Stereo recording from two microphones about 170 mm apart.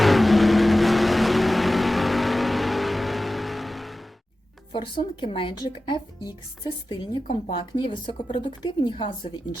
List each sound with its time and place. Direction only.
0.0 s vehicle: centre (ahead or behind)
4.7 s speech: 30° left (ahead or behind)